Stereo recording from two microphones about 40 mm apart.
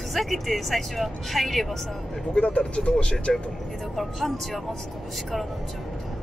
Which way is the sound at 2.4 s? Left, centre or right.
Left.